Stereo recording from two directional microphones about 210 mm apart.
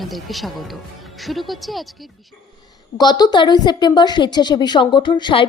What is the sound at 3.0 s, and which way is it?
Speech, 20° left (ahead or behind).